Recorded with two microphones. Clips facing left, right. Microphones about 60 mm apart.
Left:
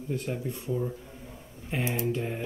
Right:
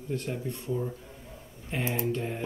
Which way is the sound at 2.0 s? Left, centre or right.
Centre.